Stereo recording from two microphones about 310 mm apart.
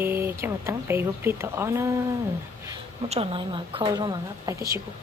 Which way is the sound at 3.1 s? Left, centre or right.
Centre.